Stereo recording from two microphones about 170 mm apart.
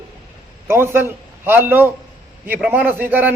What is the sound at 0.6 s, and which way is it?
A man's voice, 15° right (ahead or behind).